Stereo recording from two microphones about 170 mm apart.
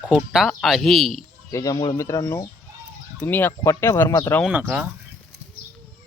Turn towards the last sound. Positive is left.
turn(degrees=-10)  # may be behind; listen again after turning